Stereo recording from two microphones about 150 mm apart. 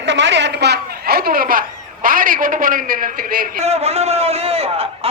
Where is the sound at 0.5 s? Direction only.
90° right; by 3.6 s 70° right (ahead or behind).